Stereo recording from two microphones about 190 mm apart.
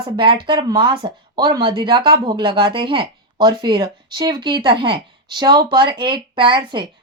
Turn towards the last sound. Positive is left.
turn(degrees=-25)  # may be behind; listen again after turning